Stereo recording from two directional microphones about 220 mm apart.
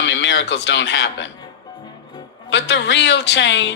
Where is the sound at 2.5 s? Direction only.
55° left (ahead or behind).